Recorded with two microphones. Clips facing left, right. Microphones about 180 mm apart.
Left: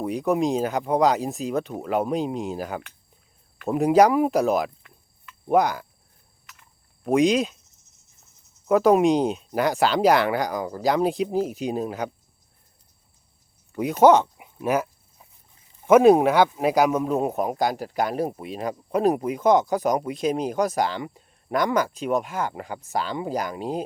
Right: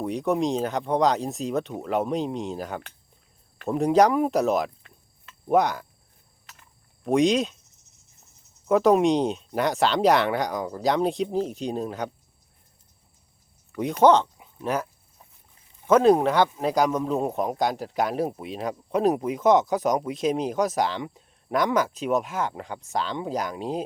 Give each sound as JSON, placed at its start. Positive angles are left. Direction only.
{"t": 0.0, "sound": "speech", "side_deg": 0}
{"t": 6.4, "sound": "a sound", "side_deg": -35}
{"t": 7.0, "sound": "speech", "side_deg": 0}
{"t": 8.6, "sound": "speech", "side_deg": 0}
{"t": 13.7, "sound": "speech", "side_deg": 5}
{"t": 15.9, "sound": "speech", "side_deg": 10}